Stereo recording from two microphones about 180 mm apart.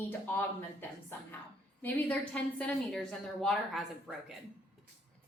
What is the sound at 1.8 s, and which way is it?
A woman's voice, 10° left (ahead or behind).